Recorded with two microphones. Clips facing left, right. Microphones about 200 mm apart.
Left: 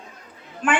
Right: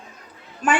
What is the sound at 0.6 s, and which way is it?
Speech, 40° right (ahead or behind).